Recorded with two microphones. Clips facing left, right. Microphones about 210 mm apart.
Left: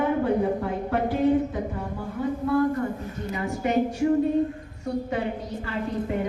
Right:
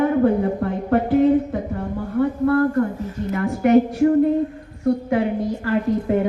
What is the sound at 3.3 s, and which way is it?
Speech, 60° right (ahead or behind).